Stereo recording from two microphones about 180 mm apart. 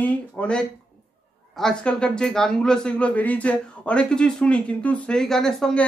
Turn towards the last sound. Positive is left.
turn(degrees=5)  # may be behind; listen again after turning